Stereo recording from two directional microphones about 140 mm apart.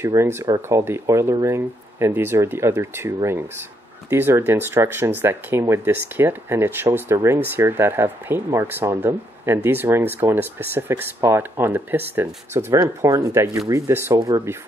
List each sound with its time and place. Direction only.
0.0 s speech: 20° right (ahead or behind)